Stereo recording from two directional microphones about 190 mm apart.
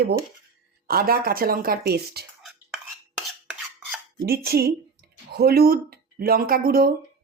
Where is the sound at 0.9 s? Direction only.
50° right (ahead or behind).